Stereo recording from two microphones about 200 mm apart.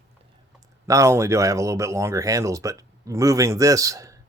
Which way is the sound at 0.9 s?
15° right (ahead or behind).